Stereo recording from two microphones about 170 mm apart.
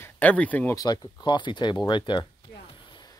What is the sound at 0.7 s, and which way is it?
Speech, 20° left (ahead or behind).